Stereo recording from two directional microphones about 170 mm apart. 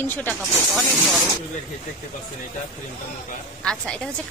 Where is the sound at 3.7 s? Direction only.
5° left (ahead or behind).